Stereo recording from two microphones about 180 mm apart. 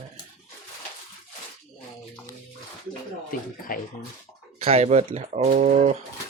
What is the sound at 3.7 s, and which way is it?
Speech, 50° left (ahead or behind).